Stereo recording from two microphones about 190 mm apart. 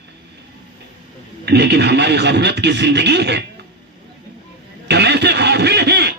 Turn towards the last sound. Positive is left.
turn(degrees=-60)  # may be behind; listen again after turning